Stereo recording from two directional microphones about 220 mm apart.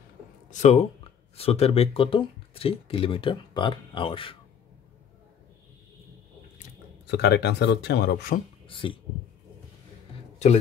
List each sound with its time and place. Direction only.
0.5 s speech: 30° left (ahead or behind)
7.1 s speech: 50° left (ahead or behind)
8.6 s a sound: 25° left (ahead or behind)